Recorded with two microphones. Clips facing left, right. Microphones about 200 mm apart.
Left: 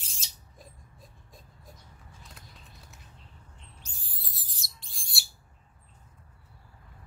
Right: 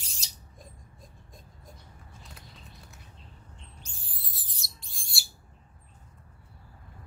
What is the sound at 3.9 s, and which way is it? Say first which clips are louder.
Owl: right 1 dB; centre (ahead or behind).